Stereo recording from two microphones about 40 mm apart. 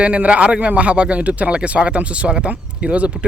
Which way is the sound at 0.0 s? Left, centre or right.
Right.